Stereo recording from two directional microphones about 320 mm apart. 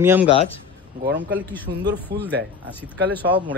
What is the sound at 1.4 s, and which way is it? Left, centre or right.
Speech, centre.